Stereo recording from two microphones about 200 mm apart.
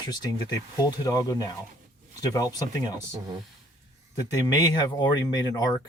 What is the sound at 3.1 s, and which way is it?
Speech, 20° right (ahead or behind).